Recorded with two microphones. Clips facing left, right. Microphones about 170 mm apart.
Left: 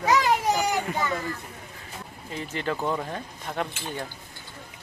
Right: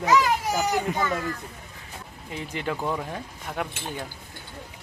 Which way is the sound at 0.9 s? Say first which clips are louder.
Right 2 dB; 20° right (ahead or behind).